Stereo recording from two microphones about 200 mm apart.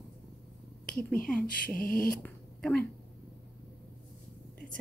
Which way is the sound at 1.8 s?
45° left (ahead or behind).